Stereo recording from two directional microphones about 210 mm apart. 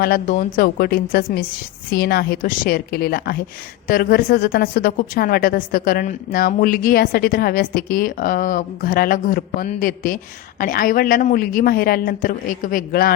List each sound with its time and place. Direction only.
0.0 s a woman's voice: 40° left (ahead or behind)